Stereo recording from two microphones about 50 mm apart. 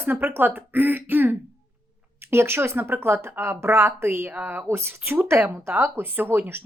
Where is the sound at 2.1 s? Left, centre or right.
Right.